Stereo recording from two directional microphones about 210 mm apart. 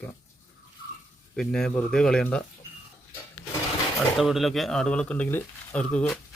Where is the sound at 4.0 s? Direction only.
Centre (ahead or behind).